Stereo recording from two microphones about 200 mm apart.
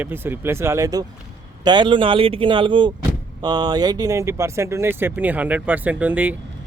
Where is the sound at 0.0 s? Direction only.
10° right (ahead or behind).